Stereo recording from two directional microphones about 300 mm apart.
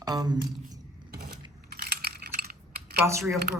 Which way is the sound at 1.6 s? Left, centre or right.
Right.